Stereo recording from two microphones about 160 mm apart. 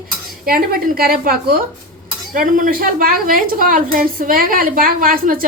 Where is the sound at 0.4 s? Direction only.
65° right (ahead or behind).